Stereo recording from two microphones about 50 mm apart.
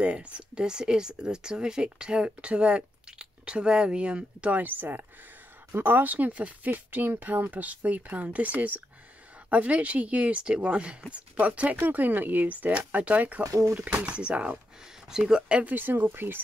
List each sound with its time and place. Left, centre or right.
0.0 s speech: right
4.6 s speech: right
13.4 s speech: right
14.0 s speech: right
15.0 s speech: centre
15.7 s speech: right